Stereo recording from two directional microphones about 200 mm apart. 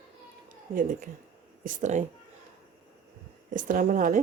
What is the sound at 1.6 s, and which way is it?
Speech, 40° right (ahead or behind).